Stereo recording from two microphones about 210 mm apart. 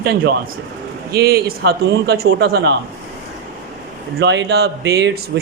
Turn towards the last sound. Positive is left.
turn(degrees=-55)  # may be behind; listen again after turning